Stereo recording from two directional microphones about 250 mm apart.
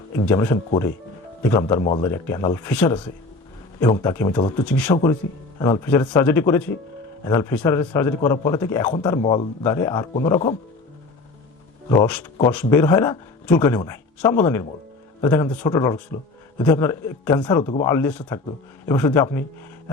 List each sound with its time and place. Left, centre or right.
0.3 s speech: centre
1.8 s a man's voice: left
2.0 s speech: centre
4.6 s a man's voice: centre
11.9 s speech: centre